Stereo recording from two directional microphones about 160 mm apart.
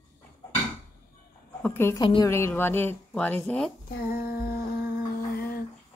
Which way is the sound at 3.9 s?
70° left (ahead or behind).